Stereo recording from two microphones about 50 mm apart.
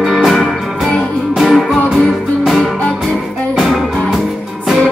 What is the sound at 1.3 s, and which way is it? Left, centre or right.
Music, centre.